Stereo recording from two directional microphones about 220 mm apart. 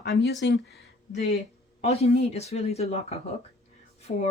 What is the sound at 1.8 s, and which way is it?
Speech, 30° left (ahead or behind).